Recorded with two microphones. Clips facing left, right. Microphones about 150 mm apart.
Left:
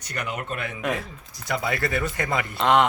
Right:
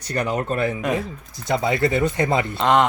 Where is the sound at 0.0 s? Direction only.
35° right (ahead or behind).